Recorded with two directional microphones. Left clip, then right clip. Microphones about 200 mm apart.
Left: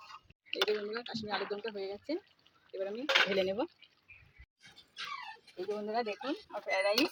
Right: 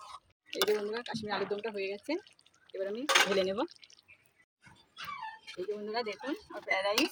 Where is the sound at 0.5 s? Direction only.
40° right (ahead or behind).